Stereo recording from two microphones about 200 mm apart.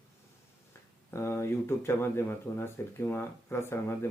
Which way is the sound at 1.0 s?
15° left (ahead or behind).